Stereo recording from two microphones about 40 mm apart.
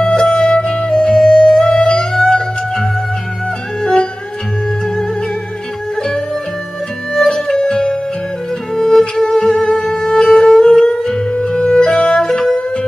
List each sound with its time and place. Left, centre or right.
0.0 s music: centre
7.2 s music: centre
11.3 s music: left